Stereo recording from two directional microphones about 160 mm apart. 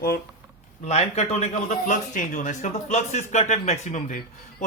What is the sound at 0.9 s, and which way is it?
A man's voice, 45° left (ahead or behind).